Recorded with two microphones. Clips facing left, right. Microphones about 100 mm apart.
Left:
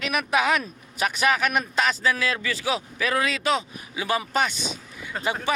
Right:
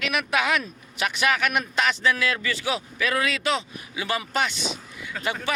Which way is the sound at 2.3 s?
10° left (ahead or behind).